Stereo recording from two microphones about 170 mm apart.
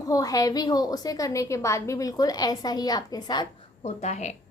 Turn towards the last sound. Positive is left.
turn(degrees=40)  # may be behind; listen again after turning